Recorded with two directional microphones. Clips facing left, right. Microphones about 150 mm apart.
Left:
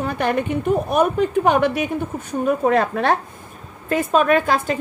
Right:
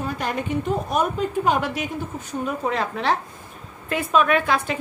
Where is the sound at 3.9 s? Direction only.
40° left (ahead or behind).